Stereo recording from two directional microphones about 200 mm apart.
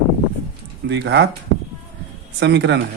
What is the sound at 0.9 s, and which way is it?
Speech, 60° right (ahead or behind).